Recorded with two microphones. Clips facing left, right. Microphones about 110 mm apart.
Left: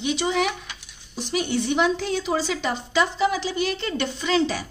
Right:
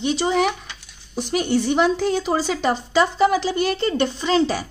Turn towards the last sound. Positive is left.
turn(degrees=-40)  # may be behind; listen again after turning